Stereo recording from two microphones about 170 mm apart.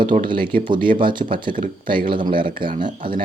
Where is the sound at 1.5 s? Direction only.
55° right (ahead or behind).